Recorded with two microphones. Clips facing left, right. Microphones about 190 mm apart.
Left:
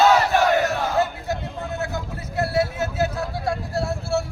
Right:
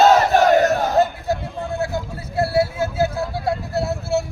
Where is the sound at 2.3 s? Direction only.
30° right (ahead or behind).